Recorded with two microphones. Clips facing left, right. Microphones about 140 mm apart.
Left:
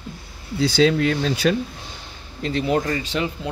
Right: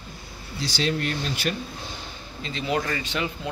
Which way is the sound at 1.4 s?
90° left.